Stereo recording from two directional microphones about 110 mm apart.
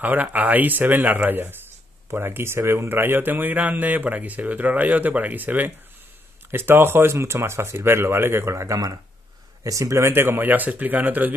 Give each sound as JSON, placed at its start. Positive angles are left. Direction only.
{"t": 0.0, "sound": "speech", "side_deg": -15}